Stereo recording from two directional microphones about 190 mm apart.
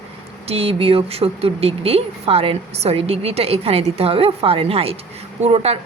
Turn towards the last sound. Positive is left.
turn(degrees=-30)  # may be behind; listen again after turning